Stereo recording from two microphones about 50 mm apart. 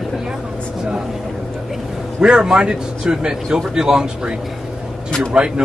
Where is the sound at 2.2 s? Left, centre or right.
Centre.